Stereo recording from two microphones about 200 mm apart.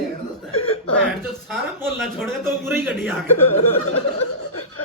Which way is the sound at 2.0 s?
Centre (ahead or behind).